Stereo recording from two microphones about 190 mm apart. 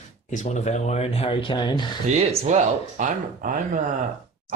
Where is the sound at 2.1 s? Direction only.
40° right (ahead or behind).